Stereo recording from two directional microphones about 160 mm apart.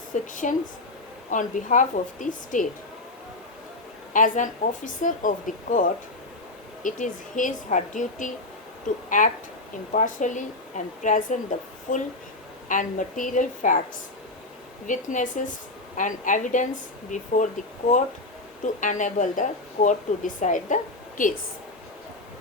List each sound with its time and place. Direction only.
0.1 s a woman's voice: 55° left (ahead or behind)
4.1 s a woman's voice: 55° left (ahead or behind)
14.8 s a woman's voice: 55° left (ahead or behind)